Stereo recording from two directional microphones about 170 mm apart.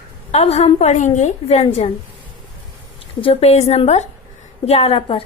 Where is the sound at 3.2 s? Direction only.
35° left (ahead or behind).